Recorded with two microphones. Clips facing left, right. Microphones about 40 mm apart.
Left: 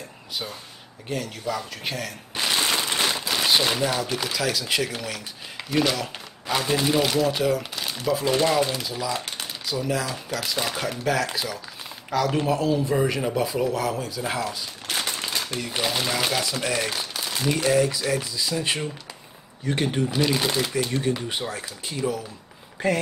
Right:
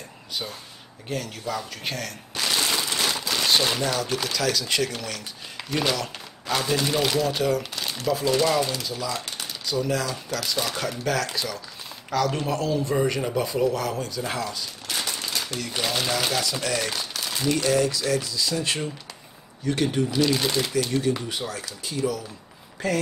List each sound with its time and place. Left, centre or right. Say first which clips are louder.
1.0 s speech: left 1 dB; centre
2.3 s a sound: left 1 dB; left
3.1 s speech: right 1 dB; centre
6.4 s speech: left 1 dB; centre
15.0 s machine gun: left 1 dB; left
15.4 s speech: left 1 dB; centre
20.7 s speech: right 1 dB; left